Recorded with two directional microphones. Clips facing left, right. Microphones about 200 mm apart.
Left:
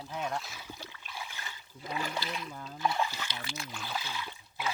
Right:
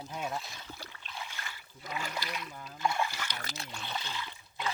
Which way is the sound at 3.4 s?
40° right (ahead or behind).